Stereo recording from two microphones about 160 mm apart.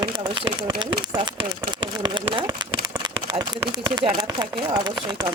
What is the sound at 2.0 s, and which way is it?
Speech, 30° right (ahead or behind).